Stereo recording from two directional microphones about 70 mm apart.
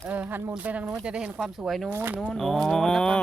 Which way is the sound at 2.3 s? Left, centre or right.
Centre.